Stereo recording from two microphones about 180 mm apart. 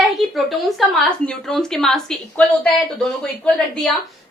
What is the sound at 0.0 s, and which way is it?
Speech, centre (ahead or behind).